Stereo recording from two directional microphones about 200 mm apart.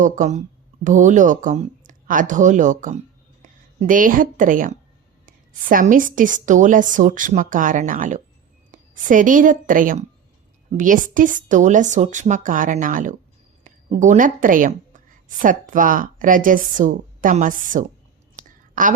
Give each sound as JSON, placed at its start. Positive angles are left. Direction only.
{"t": 0.0, "sound": "a woman's voice", "side_deg": -35}